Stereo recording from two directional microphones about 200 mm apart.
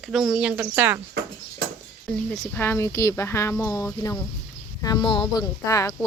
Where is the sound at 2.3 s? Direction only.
5° left (ahead or behind).